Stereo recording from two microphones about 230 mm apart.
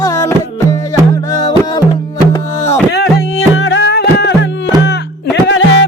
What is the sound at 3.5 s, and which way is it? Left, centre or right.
Music, left.